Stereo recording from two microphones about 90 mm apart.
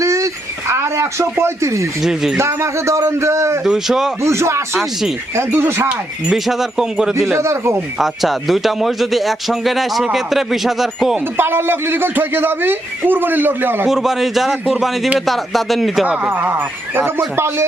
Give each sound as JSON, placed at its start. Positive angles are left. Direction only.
{"t": 0.0, "sound": "a sound", "side_deg": -35}
{"t": 0.7, "sound": "a man's voice", "side_deg": -30}
{"t": 2.0, "sound": "a man's voice", "side_deg": -5}
{"t": 2.4, "sound": "a man's voice", "side_deg": -30}
{"t": 3.6, "sound": "a man's voice", "side_deg": -5}
{"t": 4.2, "sound": "a man's voice", "side_deg": -30}
{"t": 6.2, "sound": "a man's voice", "side_deg": -5}
{"t": 7.3, "sound": "a man's voice", "side_deg": -30}
{"t": 7.9, "sound": "a man's voice", "side_deg": 0}
{"t": 11.3, "sound": "a man's voice", "side_deg": -25}
{"t": 13.8, "sound": "a man's voice", "side_deg": -5}
{"t": 16.0, "sound": "a man's voice", "side_deg": -20}